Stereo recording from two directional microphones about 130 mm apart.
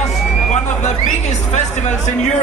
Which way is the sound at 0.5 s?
65° left (ahead or behind).